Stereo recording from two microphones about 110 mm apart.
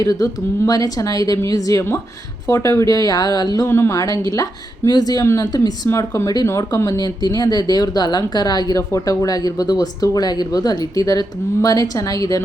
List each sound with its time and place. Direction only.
0.0 s speech: 35° left (ahead or behind)
3.7 s speech: 25° left (ahead or behind)
5.2 s speech: 25° left (ahead or behind)
5.5 s speech: 35° left (ahead or behind)